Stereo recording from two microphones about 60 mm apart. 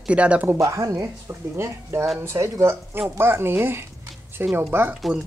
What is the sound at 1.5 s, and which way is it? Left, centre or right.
Speech, right.